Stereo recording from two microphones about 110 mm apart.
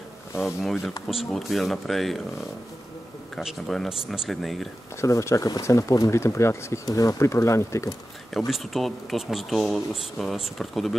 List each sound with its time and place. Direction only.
0.4 s speech: centre (ahead or behind)
3.3 s speech: centre (ahead or behind)
5.0 s speech: 30° left (ahead or behind)
8.3 s speech: centre (ahead or behind)